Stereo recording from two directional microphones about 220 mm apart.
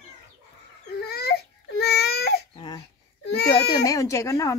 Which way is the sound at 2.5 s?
20° left (ahead or behind).